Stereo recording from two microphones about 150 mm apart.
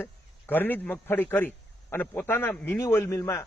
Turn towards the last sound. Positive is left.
turn(degrees=20)  # may be behind; listen again after turning